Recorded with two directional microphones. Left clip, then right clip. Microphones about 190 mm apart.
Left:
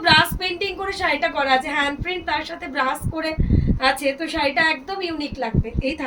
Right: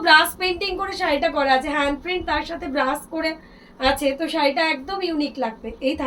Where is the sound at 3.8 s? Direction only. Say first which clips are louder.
Right 1 dB; 20° left (ahead or behind).